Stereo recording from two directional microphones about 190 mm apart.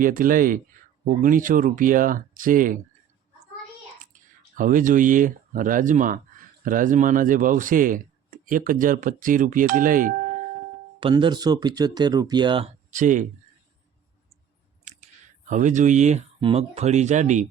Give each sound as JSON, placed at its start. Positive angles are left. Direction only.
{"t": 0.0, "sound": "speech", "side_deg": -45}
{"t": 4.5, "sound": "speech", "side_deg": -45}
{"t": 11.0, "sound": "speech", "side_deg": -25}
{"t": 12.9, "sound": "speech", "side_deg": -40}
{"t": 14.8, "sound": "speech", "side_deg": -40}